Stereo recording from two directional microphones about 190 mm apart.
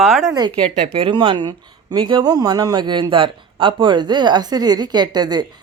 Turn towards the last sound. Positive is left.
turn(degrees=-20)  # may be behind; listen again after turning